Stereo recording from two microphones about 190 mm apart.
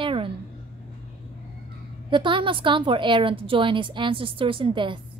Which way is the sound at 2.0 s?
25° right (ahead or behind).